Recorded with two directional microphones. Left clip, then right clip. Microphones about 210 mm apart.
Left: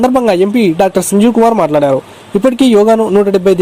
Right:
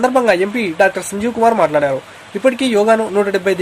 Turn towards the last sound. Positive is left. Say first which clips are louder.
# left 6 dB
turn(degrees=30)  # may be behind; listen again after turning